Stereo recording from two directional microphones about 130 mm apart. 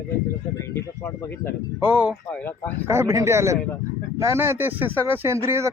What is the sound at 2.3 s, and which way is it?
Speech, 10° left (ahead or behind).